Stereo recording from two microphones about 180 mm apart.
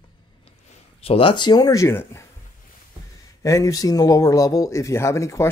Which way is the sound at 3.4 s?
15° left (ahead or behind).